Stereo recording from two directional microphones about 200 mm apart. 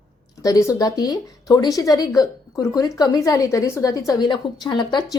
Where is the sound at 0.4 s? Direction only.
15° left (ahead or behind).